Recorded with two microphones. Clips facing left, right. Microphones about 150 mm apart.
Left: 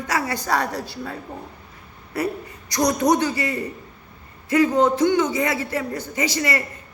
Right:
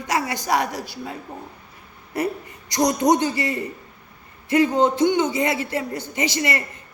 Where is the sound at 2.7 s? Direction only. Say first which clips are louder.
Right 1 dB; 20° right (ahead or behind).